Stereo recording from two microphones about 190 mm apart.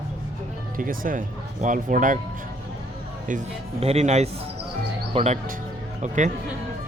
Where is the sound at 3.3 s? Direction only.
35° right (ahead or behind).